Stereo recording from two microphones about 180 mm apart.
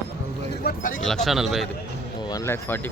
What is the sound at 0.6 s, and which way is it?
Speech, 55° left (ahead or behind).